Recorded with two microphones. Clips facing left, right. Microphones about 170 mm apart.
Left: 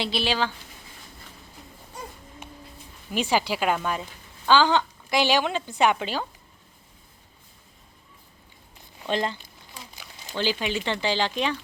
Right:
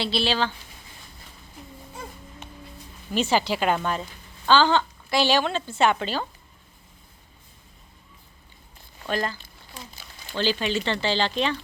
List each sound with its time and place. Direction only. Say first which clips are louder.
0.0 s a woman's voice: right 1 dB; 15° left (ahead or behind)
3.1 s a woman's voice: right 2 dB; 10° left (ahead or behind)
9.0 s speech: left 1 dB; 20° left (ahead or behind)